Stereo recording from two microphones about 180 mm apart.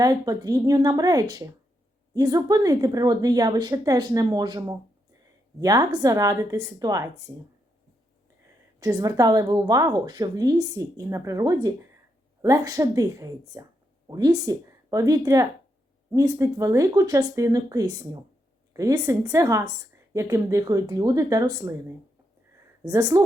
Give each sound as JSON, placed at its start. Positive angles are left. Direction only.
{"t": 0.0, "sound": "a woman's voice", "side_deg": -20}
{"t": 8.8, "sound": "a woman's voice", "side_deg": -20}